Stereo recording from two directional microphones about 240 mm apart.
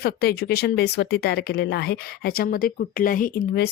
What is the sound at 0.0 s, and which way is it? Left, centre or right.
Speech, left.